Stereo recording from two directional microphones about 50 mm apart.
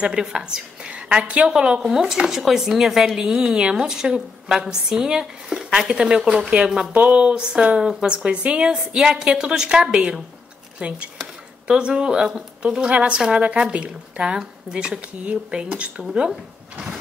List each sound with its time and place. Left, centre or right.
0.0 s a woman's voice: centre
3.1 s a woman's voice: centre
8.2 s a woman's voice: right